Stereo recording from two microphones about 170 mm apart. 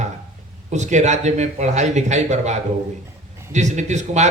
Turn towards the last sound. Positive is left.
turn(degrees=-45)  # may be behind; listen again after turning